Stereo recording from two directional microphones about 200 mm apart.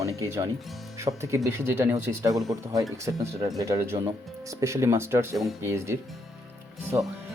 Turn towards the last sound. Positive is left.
turn(degrees=-10)  # may be behind; listen again after turning